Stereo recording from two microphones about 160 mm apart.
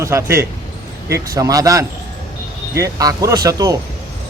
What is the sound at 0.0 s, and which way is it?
Speech, 15° right (ahead or behind).